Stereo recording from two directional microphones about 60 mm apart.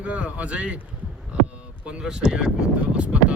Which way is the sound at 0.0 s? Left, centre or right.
Right.